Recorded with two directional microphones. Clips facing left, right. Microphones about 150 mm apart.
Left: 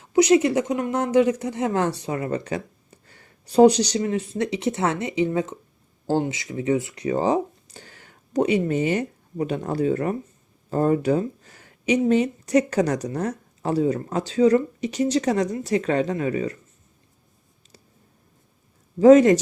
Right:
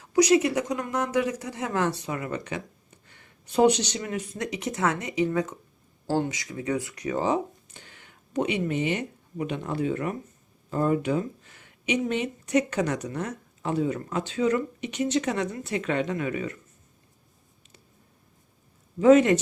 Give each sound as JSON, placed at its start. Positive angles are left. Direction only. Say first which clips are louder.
{"t": 0.0, "sound": "speech", "louder": "left 3 dB", "side_deg": 25}
{"t": 18.9, "sound": "speech", "louder": "left 5 dB", "side_deg": 35}